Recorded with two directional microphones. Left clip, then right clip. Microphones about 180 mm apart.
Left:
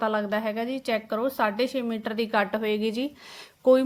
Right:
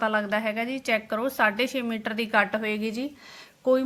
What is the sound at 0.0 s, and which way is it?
A woman's voice, 20° left (ahead or behind).